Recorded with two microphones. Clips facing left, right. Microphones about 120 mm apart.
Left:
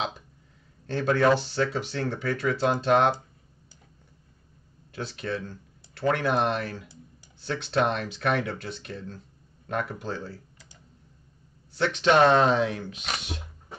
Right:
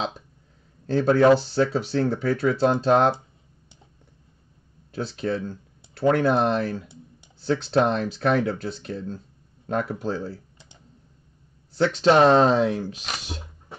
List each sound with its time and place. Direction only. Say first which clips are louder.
0.9 s speech: right 5 dB; 30° right (ahead or behind)
4.9 s speech: right 5 dB; 30° right (ahead or behind)
11.8 s speech: right 3 dB; 35° right (ahead or behind)